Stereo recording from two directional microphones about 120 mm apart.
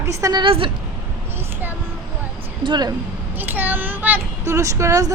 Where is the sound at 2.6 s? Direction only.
40° right (ahead or behind).